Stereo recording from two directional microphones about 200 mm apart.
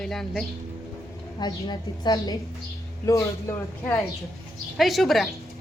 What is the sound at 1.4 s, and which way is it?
A woman's voice, 20° left (ahead or behind).